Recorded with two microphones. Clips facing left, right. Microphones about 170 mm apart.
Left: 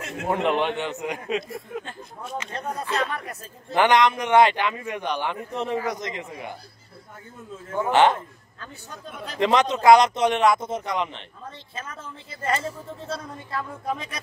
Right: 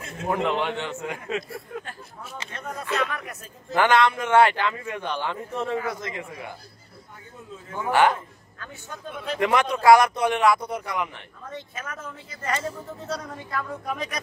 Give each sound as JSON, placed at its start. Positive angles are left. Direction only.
{"t": 0.3, "sound": "a man's voice", "side_deg": 20}
{"t": 2.5, "sound": "speech", "side_deg": 35}
{"t": 3.7, "sound": "a man's voice", "side_deg": 20}
{"t": 7.9, "sound": "a sound", "side_deg": 20}
{"t": 9.4, "sound": "a man's voice", "side_deg": 20}